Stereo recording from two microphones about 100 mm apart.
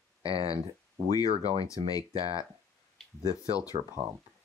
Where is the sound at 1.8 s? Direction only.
60° right (ahead or behind).